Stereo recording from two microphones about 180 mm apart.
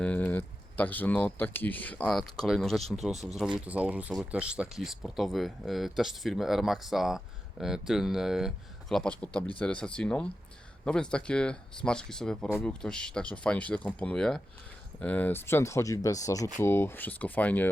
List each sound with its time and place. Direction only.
0.0 s speech: 10° left (ahead or behind)